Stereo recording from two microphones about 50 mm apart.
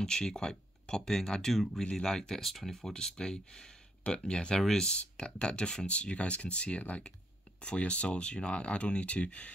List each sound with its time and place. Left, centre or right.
0.0 s speech: centre
4.6 s speech: centre
4.8 s speech: left